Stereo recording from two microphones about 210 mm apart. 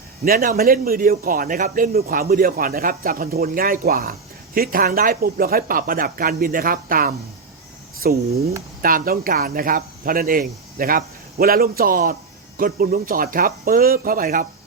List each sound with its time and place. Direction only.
0.3 s speech: 45° right (ahead or behind)